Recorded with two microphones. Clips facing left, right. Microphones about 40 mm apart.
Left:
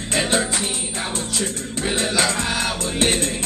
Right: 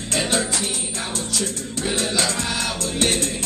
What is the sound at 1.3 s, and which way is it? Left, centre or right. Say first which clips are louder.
Music: left 1 dB; left.